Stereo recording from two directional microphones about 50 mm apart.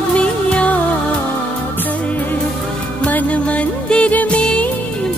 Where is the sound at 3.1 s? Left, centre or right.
Left.